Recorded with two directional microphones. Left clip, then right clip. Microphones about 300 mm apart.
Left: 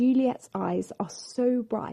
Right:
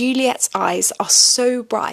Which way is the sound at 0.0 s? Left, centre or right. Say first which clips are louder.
Right 7 dB; centre.